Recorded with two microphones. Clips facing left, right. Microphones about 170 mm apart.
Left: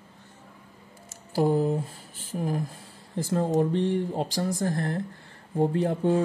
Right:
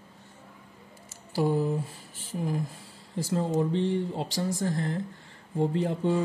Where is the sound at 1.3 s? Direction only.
50° left (ahead or behind).